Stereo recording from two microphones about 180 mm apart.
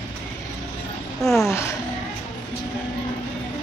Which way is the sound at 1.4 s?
15° left (ahead or behind).